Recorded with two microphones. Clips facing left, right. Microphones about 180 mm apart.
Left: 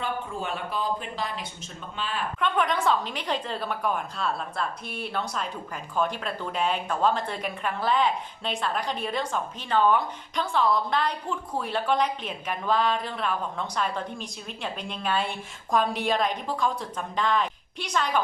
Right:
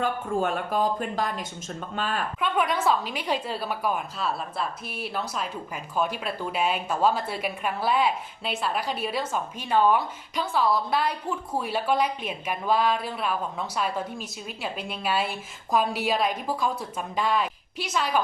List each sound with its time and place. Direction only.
0.0 s speech: 45° right (ahead or behind)
2.4 s a woman's voice: 5° right (ahead or behind)